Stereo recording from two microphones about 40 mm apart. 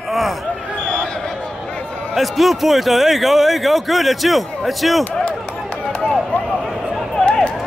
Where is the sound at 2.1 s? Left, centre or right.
Centre.